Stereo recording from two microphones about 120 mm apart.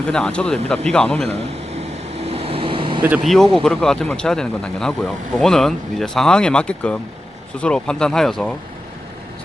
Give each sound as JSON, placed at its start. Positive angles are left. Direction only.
{"t": 0.1, "sound": "speech", "side_deg": 10}
{"t": 2.2, "sound": "vehicle", "side_deg": -55}
{"t": 3.2, "sound": "speech", "side_deg": 0}